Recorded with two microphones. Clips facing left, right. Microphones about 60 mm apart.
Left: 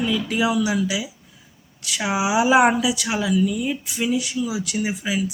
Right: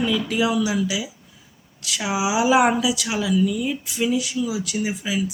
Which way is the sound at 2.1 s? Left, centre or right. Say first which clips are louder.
Left 2 dB; left.